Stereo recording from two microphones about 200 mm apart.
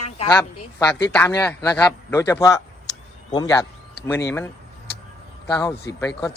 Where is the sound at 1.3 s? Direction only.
15° left (ahead or behind).